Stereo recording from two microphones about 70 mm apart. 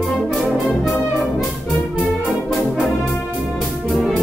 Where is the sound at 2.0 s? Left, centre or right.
Centre.